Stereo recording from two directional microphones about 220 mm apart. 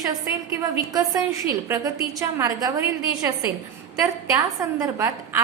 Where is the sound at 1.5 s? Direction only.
15° right (ahead or behind).